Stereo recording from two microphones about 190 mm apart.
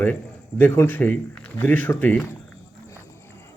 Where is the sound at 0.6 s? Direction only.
10° left (ahead or behind).